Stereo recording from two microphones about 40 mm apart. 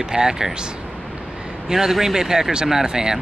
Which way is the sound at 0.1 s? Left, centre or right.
Centre.